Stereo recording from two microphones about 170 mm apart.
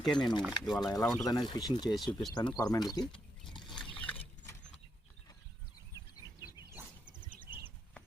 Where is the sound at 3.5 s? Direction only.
25° left (ahead or behind).